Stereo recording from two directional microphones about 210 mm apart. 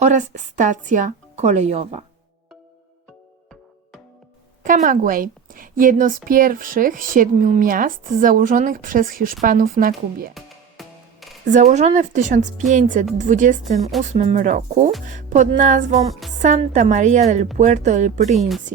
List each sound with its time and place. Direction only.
0.0 s a woman's voice: 35° right (ahead or behind)
4.6 s a woman's voice: 40° right (ahead or behind)
10.3 s music: centre (ahead or behind)
11.4 s a woman's voice: 35° right (ahead or behind)
18.3 s speech: centre (ahead or behind)